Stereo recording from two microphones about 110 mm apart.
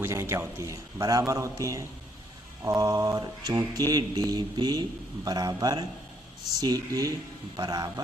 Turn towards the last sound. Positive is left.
turn(degrees=-40)  # may be behind; listen again after turning